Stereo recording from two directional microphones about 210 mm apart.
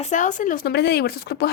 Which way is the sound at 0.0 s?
35° left (ahead or behind).